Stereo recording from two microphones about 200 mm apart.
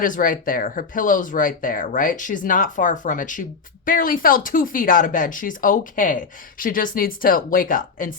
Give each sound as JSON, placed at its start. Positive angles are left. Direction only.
{"t": 0.0, "sound": "speech", "side_deg": 40}